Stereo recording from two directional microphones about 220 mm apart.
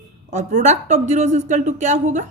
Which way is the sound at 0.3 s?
30° right (ahead or behind).